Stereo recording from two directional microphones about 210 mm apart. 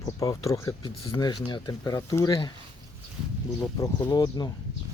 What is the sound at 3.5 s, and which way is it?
Speech, 15° left (ahead or behind).